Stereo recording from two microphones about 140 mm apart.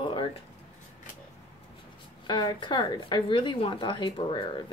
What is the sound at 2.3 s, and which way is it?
A woman's voice, 35° left (ahead or behind).